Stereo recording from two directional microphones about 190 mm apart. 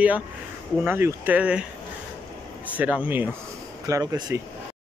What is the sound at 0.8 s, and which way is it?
Speech, 10° right (ahead or behind).